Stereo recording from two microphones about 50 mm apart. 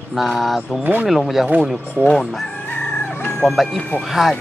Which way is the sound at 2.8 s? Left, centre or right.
Left.